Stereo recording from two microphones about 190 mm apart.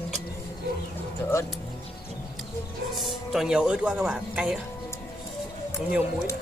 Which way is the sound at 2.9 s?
Centre (ahead or behind).